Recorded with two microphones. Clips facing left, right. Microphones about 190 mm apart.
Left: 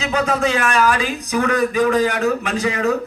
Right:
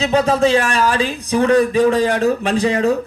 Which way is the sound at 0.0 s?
30° right (ahead or behind).